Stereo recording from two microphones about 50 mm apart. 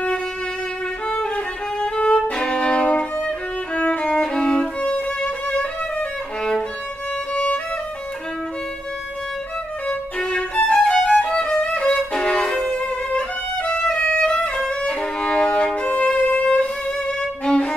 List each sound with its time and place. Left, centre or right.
1.0 s violin: centre
3.8 s music: left
7.3 s violin: left
9.8 s violin: left
13.7 s violin: centre
13.9 s music: left
14.7 s violin: centre